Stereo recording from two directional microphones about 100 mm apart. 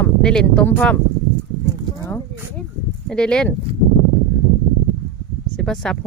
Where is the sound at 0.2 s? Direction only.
5° left (ahead or behind).